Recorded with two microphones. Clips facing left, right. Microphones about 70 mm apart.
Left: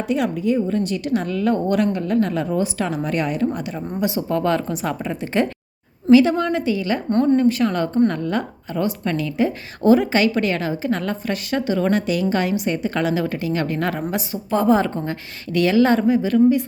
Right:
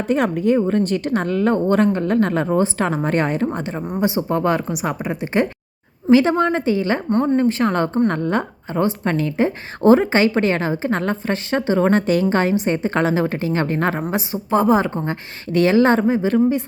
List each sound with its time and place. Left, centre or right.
0.1 s a woman's voice: right
3.8 s a woman's voice: right
7.1 s a woman's voice: centre
7.3 s a woman's voice: right